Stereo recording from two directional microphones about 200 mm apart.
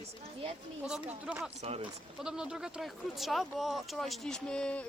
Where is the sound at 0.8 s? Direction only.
5° right (ahead or behind).